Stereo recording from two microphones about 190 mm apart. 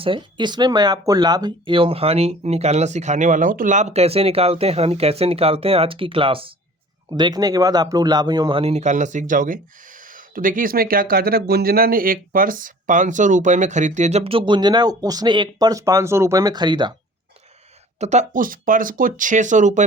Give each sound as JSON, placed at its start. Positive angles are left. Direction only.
{"t": 0.0, "sound": "speech", "side_deg": -25}
{"t": 18.0, "sound": "speech", "side_deg": -35}